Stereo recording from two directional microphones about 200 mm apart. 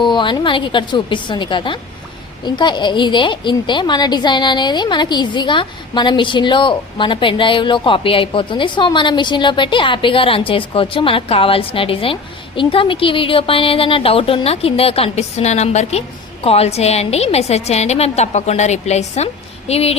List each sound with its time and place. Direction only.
0.0 s a woman's voice: 25° left (ahead or behind)